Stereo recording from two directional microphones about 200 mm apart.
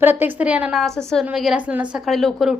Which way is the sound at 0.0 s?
10° right (ahead or behind).